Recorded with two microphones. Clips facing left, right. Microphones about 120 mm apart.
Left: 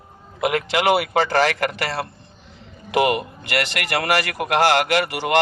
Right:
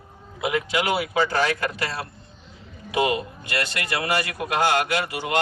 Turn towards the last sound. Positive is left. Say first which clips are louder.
# left 5 dB
turn(degrees=85)